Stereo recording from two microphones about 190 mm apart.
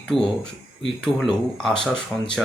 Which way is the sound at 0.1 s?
30° left (ahead or behind).